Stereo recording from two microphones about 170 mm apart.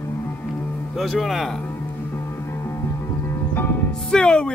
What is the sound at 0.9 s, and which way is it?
Speech, centre (ahead or behind).